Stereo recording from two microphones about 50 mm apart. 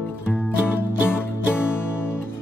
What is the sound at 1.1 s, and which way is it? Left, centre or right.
Music, left.